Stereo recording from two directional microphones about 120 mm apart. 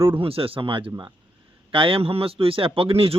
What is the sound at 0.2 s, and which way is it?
Speech, 50° right (ahead or behind).